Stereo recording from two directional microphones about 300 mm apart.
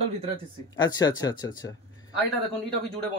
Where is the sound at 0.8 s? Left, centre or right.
Centre.